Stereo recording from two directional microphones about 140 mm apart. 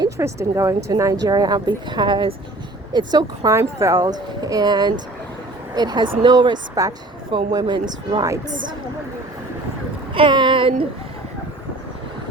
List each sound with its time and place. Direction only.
0.0 s speech: 20° right (ahead or behind)
10.2 s speech: 35° right (ahead or behind)